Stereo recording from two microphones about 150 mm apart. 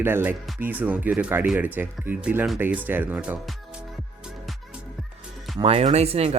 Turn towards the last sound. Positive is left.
turn(degrees=-45)  # may be behind; listen again after turning